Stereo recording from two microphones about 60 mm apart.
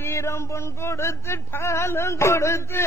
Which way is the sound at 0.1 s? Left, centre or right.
Left.